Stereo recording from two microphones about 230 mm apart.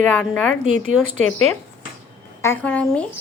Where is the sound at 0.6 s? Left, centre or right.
Right.